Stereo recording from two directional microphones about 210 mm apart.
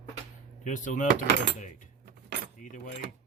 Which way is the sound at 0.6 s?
35° left (ahead or behind).